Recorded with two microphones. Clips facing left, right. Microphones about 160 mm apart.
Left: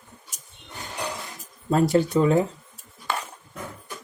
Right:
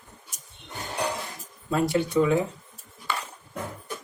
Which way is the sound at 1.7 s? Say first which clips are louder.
Left 3 dB; 40° left (ahead or behind).